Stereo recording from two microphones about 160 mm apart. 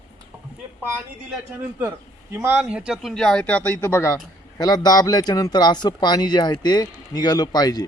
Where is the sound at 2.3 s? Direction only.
15° right (ahead or behind).